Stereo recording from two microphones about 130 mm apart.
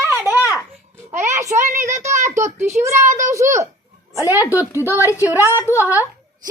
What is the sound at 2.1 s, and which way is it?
Speech, 65° right (ahead or behind).